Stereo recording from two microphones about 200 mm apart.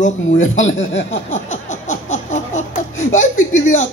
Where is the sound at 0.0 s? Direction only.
70° left (ahead or behind).